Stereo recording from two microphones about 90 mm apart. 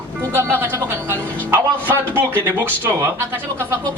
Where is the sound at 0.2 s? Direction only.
25° right (ahead or behind).